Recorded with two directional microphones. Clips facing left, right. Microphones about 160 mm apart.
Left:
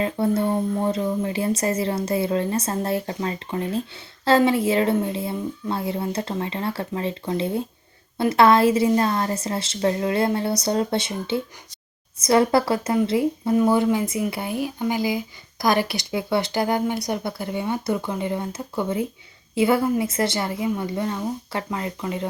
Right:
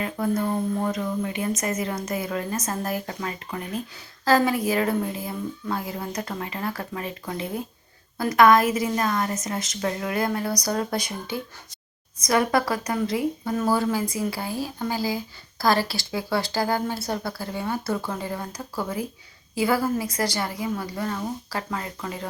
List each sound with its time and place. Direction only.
0.0 s speech: 30° left (ahead or behind)